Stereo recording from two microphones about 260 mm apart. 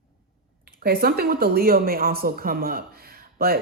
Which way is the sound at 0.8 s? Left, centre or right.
Right.